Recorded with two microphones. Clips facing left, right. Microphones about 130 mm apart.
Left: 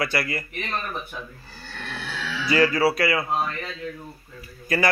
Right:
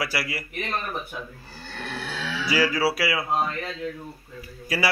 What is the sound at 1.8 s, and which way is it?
A man's voice, 10° right (ahead or behind).